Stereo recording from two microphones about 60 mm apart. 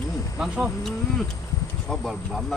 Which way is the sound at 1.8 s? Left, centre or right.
Centre.